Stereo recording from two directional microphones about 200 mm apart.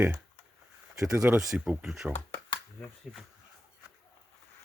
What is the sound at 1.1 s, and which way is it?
Speech, 15° right (ahead or behind).